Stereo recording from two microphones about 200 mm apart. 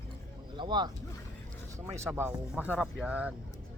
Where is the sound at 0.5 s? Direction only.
20° right (ahead or behind); by 3.3 s 5° right (ahead or behind).